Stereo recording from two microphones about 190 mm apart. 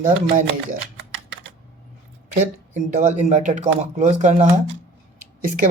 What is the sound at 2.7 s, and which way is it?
A man's voice, 40° right (ahead or behind).